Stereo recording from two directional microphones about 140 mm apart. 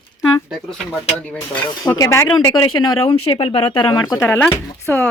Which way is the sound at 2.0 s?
20° left (ahead or behind).